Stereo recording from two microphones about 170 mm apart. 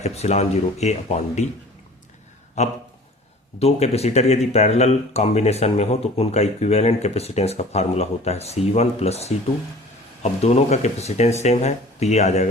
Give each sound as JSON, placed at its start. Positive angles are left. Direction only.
{"t": 0.0, "sound": "speech", "side_deg": 40}
{"t": 2.6, "sound": "speech", "side_deg": 40}
{"t": 10.4, "sound": "speech", "side_deg": 40}